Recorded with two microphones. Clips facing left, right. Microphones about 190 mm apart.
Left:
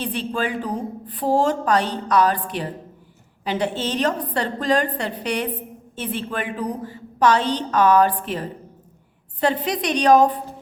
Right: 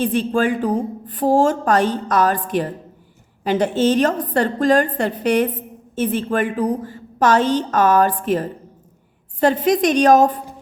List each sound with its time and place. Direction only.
0.0 s a woman's voice: 45° right (ahead or behind)